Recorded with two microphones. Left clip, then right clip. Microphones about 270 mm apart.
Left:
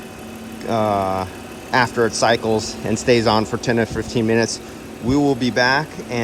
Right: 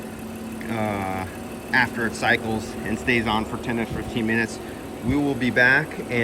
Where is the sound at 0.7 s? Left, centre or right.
Centre.